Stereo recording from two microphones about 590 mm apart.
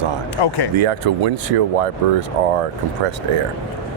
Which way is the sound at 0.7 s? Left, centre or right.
Right.